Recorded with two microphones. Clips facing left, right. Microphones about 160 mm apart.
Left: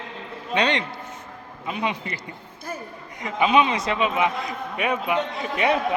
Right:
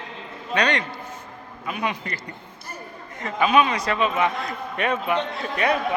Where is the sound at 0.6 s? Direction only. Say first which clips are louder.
Even; 25° left (ahead or behind).